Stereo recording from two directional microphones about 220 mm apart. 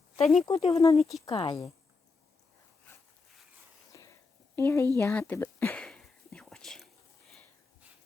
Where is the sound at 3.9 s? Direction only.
15° left (ahead or behind).